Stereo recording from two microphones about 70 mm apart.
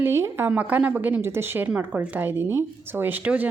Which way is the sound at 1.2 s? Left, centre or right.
Right.